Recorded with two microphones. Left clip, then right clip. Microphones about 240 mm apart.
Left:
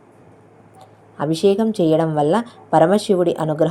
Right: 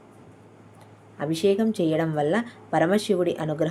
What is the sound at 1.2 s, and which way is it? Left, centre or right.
Speech, centre.